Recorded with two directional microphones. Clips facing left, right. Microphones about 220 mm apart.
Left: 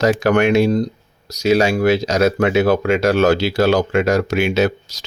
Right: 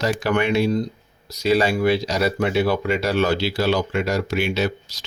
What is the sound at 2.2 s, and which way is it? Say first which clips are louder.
Speech: left 6 dB; 90° left.